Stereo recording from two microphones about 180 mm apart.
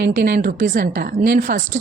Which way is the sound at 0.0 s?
55° right (ahead or behind).